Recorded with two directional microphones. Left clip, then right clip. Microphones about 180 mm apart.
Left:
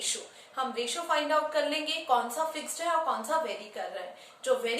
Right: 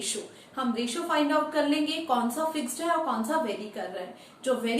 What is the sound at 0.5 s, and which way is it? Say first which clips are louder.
A woman's voice: right 1 dB; 10° left (ahead or behind).